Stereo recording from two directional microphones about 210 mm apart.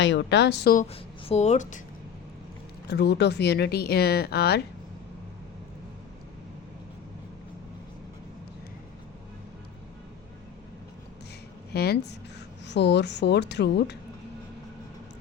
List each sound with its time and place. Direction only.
0.0 s a woman's voice: 60° left (ahead or behind)
1.2 s speech: 30° left (ahead or behind)
2.8 s speech: 50° left (ahead or behind)
11.7 s speech: 50° left (ahead or behind)